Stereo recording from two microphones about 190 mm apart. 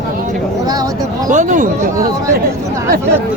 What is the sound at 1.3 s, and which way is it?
Speech, 40° right (ahead or behind).